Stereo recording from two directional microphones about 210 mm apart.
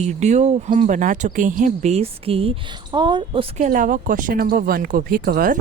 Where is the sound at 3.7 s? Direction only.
40° right (ahead or behind).